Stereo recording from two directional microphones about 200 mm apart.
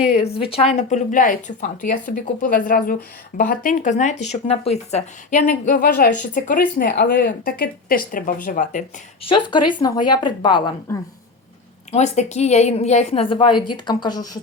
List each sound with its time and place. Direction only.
0.1 s speech: 30° left (ahead or behind)
9.3 s speech: 25° left (ahead or behind)
11.9 s speech: 35° left (ahead or behind)